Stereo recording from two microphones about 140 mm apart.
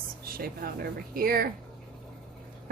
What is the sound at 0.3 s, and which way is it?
A woman's voice, 90° right.